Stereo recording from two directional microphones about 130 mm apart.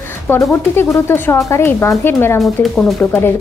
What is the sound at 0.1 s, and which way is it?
Speech, 20° left (ahead or behind).